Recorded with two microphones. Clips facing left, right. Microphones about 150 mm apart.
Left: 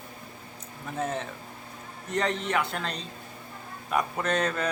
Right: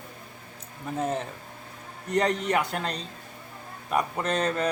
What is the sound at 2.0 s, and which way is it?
Speech, 40° right (ahead or behind).